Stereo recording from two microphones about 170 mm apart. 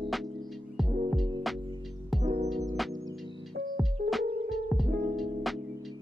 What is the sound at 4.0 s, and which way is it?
Music, 55° right (ahead or behind).